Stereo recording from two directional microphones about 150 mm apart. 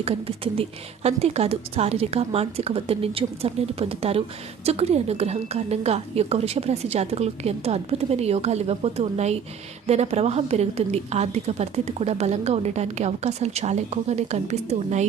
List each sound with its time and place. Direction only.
0.0 s a woman's voice: 40° right (ahead or behind)